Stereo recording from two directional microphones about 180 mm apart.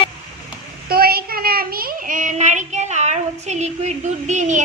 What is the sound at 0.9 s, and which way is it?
Child singing, 55° right (ahead or behind).